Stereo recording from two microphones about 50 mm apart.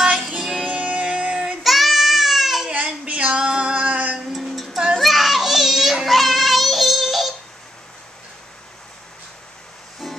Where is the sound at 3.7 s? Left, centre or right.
Right.